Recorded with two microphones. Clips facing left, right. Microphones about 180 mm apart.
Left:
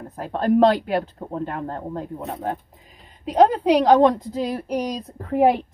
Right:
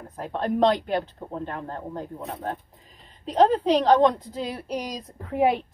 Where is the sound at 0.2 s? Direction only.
5° left (ahead or behind).